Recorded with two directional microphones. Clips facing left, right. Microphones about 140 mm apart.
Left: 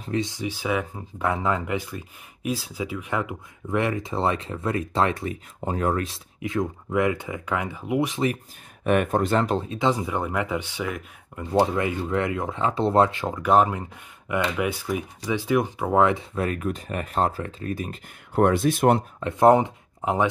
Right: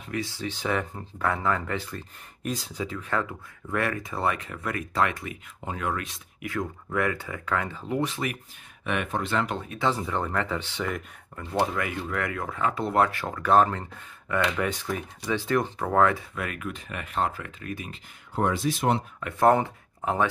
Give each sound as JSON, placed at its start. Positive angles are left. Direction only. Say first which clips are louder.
{"t": 0.2, "sound": "speech", "louder": "left 3 dB", "side_deg": 15}
{"t": 1.3, "sound": "speech", "louder": "left 3 dB", "side_deg": 15}
{"t": 6.4, "sound": "speech", "louder": "left 5 dB", "side_deg": 20}
{"t": 8.8, "sound": "speech", "louder": "left 8 dB", "side_deg": 45}
{"t": 9.7, "sound": "speech", "louder": "left 3 dB", "side_deg": 15}
{"t": 11.3, "sound": "speech", "louder": "left 5 dB", "side_deg": 25}
{"t": 16.3, "sound": "speech", "louder": "left 7 dB", "side_deg": 35}
{"t": 18.3, "sound": "speech", "louder": "left 6 dB", "side_deg": 60}
{"t": 19.1, "sound": "speech", "louder": "left 2 dB", "side_deg": 20}